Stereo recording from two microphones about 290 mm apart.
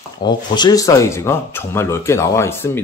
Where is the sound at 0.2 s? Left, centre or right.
Centre.